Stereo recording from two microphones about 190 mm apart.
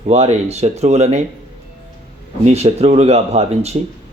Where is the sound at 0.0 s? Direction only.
35° right (ahead or behind).